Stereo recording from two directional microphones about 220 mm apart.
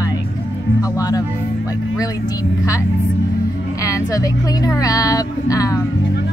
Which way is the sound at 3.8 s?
15° left (ahead or behind).